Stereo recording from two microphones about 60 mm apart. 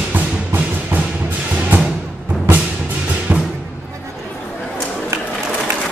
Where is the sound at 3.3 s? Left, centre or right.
Right.